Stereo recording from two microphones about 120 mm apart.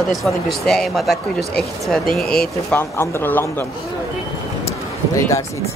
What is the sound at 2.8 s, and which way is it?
Speech, 20° left (ahead or behind).